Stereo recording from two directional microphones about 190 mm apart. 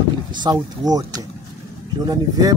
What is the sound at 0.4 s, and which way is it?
Speech, 20° right (ahead or behind).